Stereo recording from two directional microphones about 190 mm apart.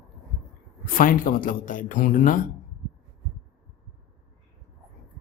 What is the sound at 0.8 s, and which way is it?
Speech, 45° left (ahead or behind).